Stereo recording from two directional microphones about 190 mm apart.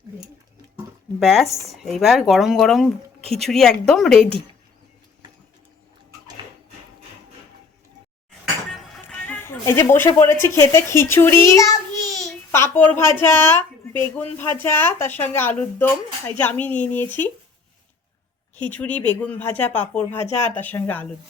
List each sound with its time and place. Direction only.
1.2 s speech: centre (ahead or behind)
1.5 s speech: 15° right (ahead or behind)
1.7 s speech: centre (ahead or behind)
8.7 s music: 5° left (ahead or behind)
10.2 s a child's voice: 15° left (ahead or behind)
18.5 s speech: 10° left (ahead or behind)
20.1 s speech: 35° left (ahead or behind)
20.5 s speech: 10° left (ahead or behind)